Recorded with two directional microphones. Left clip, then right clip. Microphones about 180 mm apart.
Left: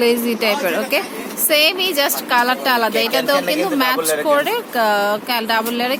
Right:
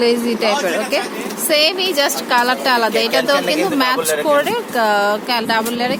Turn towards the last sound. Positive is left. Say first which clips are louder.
# right 1 dB
turn(degrees=10)  # may be behind; listen again after turning